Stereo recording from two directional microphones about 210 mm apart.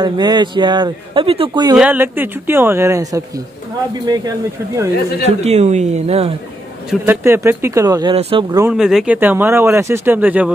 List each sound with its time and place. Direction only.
0.0 s a man's voice: 20° right (ahead or behind)
1.8 s speech: 10° right (ahead or behind)
5.2 s a woman's voice: 30° right (ahead or behind)
6.9 s speech: 10° right (ahead or behind)
8.7 s speech: 5° right (ahead or behind)